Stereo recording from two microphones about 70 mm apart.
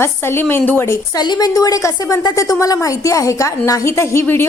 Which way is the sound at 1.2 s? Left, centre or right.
Left.